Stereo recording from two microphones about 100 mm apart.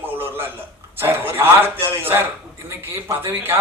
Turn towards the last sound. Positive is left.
turn(degrees=-20)  # may be behind; listen again after turning